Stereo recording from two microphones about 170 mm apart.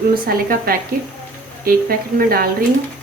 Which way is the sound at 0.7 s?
60° right (ahead or behind).